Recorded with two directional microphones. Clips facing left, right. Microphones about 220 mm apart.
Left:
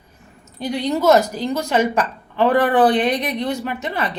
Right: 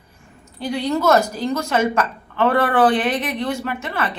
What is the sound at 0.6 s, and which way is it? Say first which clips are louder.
A woman's voice: left 1 dB; 20° left (ahead or behind).